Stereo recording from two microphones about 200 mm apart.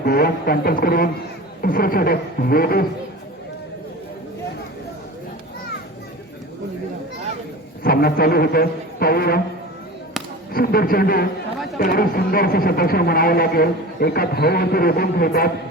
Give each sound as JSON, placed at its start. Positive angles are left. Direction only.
{"t": 0.0, "sound": "speech", "side_deg": 50}
{"t": 7.9, "sound": "speech", "side_deg": 50}
{"t": 10.5, "sound": "speech", "side_deg": 50}